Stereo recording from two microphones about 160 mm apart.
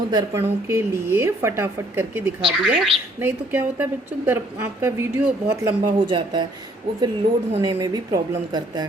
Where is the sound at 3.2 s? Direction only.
15° right (ahead or behind).